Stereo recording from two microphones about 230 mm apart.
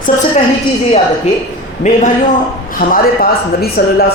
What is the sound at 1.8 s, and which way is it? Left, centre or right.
A man's voice, left.